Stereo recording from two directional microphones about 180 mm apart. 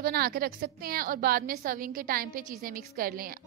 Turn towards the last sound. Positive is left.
turn(degrees=-55)  # may be behind; listen again after turning